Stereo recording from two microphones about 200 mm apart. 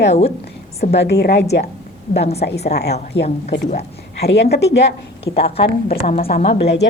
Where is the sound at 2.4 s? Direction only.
55° left (ahead or behind).